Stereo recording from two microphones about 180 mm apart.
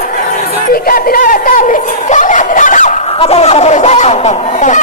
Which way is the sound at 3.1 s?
35° left (ahead or behind).